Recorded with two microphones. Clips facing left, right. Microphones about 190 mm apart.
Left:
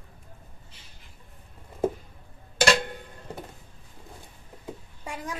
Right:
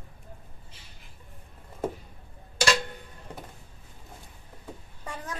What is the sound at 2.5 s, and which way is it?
Music, 55° left (ahead or behind).